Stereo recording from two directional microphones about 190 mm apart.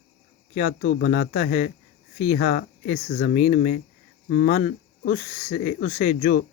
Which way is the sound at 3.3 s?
45° left (ahead or behind).